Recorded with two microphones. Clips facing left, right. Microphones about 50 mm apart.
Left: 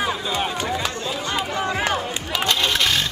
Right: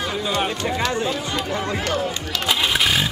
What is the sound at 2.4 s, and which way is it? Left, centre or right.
Vehicle, centre.